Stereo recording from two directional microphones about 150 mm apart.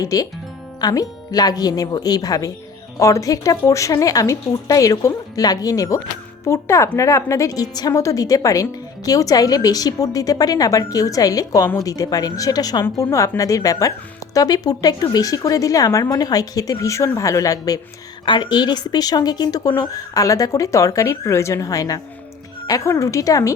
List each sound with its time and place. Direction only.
0.0 s speech: 25° left (ahead or behind)